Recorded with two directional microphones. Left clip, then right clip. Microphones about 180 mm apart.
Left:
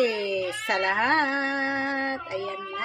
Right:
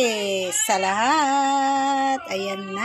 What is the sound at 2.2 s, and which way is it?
Child singing, 35° right (ahead or behind).